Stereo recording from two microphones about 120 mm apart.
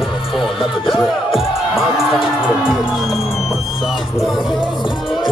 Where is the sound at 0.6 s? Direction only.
Centre (ahead or behind).